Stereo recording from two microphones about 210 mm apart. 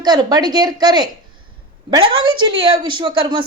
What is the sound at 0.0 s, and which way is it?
Speech, 20° right (ahead or behind).